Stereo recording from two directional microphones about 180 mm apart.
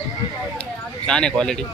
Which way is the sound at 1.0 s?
5° left (ahead or behind).